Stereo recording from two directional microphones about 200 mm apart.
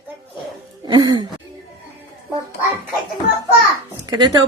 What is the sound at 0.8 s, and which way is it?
Speech, 20° right (ahead or behind).